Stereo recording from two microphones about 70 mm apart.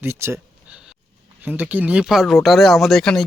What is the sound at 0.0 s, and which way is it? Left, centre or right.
Speech, right.